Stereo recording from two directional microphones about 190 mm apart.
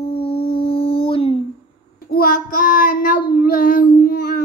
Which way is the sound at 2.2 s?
45° left (ahead or behind).